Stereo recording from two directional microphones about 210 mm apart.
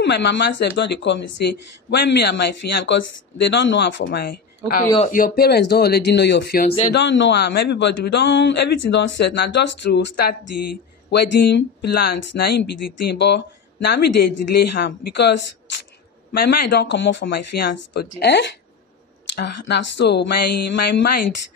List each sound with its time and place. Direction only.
0.0 s speech: 55° left (ahead or behind)